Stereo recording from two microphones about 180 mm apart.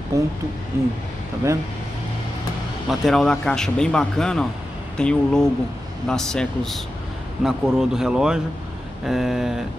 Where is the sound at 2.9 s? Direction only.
Centre (ahead or behind).